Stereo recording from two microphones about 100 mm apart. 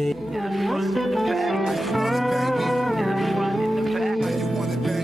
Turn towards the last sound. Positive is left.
turn(degrees=0)  # may be behind; listen again after turning